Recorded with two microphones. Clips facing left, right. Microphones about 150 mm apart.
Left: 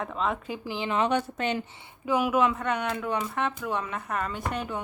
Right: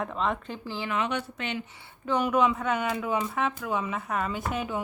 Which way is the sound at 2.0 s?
5° left (ahead or behind).